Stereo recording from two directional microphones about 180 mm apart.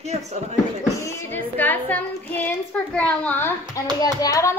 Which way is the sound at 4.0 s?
20° left (ahead or behind).